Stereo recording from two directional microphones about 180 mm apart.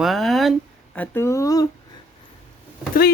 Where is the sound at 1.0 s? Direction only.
15° left (ahead or behind).